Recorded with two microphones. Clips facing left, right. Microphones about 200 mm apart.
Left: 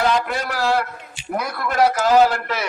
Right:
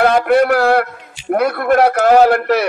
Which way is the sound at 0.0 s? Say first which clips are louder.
Right 9 dB; 65° right (ahead or behind).